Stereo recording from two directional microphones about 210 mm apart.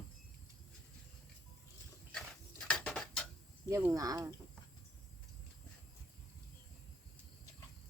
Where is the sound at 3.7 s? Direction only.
15° right (ahead or behind).